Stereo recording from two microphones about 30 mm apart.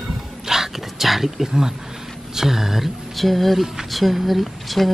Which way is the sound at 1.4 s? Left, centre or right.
Centre.